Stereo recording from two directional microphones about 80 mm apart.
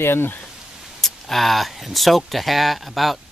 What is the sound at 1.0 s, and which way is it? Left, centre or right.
Speech, centre.